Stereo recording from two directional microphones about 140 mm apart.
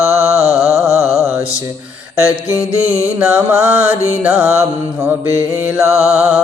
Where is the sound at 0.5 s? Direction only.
Centre (ahead or behind).